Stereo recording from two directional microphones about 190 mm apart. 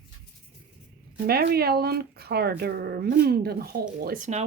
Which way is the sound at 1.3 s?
55° right (ahead or behind).